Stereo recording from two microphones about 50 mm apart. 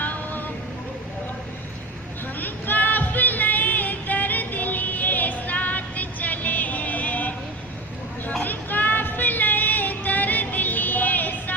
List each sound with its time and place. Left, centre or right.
0.0 s vehicle: left
2.4 s music: left
8.4 s music: left